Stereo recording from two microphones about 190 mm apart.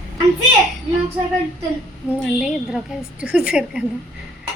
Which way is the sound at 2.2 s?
5° right (ahead or behind).